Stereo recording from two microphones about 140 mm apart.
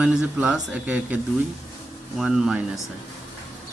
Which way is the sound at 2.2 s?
5° right (ahead or behind).